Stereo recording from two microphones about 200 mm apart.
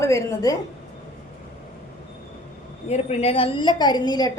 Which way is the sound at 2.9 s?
35° left (ahead or behind).